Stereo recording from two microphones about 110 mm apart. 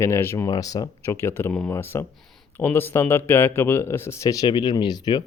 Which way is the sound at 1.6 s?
20° left (ahead or behind).